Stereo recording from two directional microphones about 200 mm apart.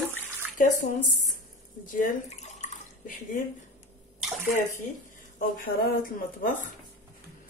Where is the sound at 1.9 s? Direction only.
40° left (ahead or behind).